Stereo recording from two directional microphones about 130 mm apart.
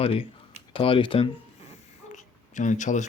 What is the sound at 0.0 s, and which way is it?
Speech, 45° left (ahead or behind).